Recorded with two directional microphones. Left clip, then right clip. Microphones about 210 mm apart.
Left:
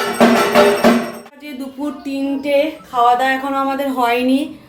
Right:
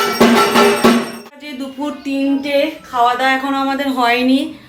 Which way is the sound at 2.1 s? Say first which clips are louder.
Right 5 dB; 10° left (ahead or behind).